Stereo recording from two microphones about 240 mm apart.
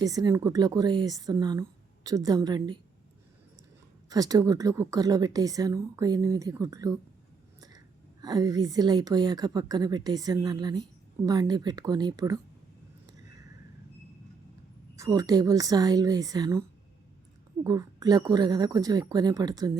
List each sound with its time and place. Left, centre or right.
0.0 s speech: centre
4.1 s speech: centre
8.2 s speech: centre
14.9 s speech: centre